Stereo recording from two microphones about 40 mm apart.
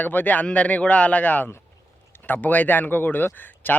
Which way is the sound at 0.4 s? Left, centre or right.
Left.